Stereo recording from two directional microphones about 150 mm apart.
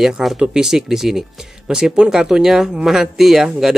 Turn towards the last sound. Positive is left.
turn(degrees=-5)  # may be behind; listen again after turning